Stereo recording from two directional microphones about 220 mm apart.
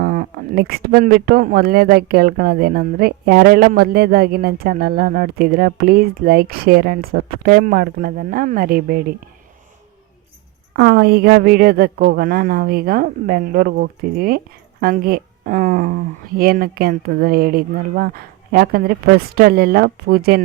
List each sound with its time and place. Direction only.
0.0 s speech: 40° right (ahead or behind)
10.8 s speech: 45° right (ahead or behind)